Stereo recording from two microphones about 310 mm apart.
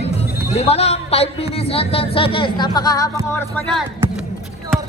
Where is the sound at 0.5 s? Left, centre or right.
Centre.